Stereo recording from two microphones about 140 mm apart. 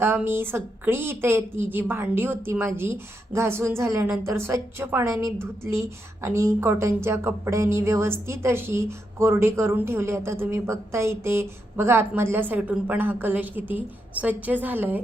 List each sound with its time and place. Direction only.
0.0 s a woman's voice: 15° right (ahead or behind)